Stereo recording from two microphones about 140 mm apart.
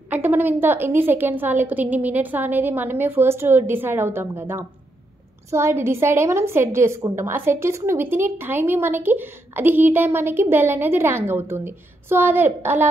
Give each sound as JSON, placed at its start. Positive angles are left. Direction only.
{"t": 0.1, "sound": "a woman's voice", "side_deg": -15}